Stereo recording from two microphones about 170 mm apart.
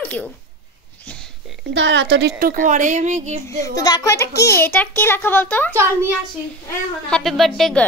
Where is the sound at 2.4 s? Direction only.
50° right (ahead or behind).